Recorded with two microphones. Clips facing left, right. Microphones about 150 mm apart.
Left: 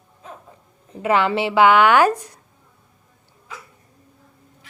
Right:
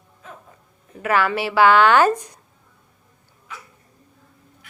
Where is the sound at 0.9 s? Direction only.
25° left (ahead or behind); by 2.4 s 10° left (ahead or behind).